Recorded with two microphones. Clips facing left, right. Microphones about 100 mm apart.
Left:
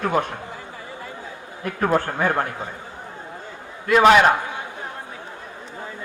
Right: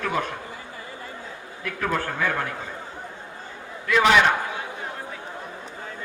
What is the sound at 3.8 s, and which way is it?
Speech, 45° left (ahead or behind).